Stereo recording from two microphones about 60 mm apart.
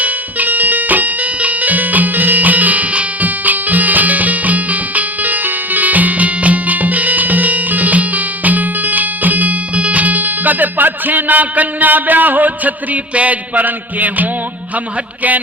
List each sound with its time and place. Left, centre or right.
0.0 s music: right